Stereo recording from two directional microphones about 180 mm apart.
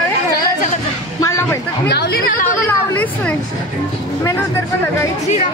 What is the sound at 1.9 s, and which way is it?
Speech, 65° left (ahead or behind).